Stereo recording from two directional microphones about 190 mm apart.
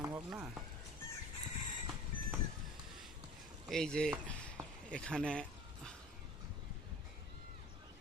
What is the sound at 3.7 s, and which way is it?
Speech, 5° left (ahead or behind).